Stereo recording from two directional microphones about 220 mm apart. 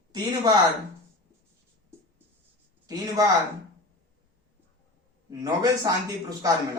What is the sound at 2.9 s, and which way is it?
Speech, 15° right (ahead or behind).